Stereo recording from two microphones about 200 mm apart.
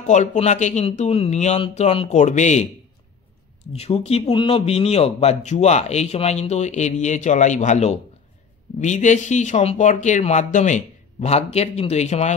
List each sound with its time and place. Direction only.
0.0 s speech: 35° left (ahead or behind)
3.7 s speech: 30° left (ahead or behind)